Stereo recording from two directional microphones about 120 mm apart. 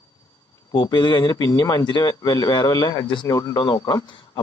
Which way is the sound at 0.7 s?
40° left (ahead or behind).